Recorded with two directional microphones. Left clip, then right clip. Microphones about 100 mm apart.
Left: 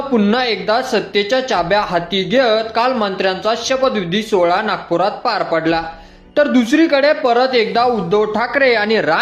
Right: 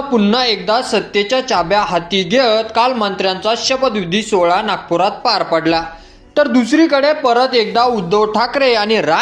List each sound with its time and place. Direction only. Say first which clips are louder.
0.1 s speech: right 2 dB; 20° right (ahead or behind)
6.3 s speech: right 1 dB; 20° right (ahead or behind)